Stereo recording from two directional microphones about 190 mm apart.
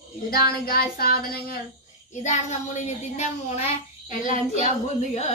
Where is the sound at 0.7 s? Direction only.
55° left (ahead or behind).